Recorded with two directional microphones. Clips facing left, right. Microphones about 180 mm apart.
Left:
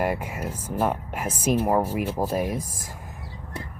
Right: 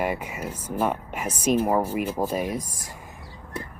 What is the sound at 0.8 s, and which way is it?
Speech, 5° left (ahead or behind).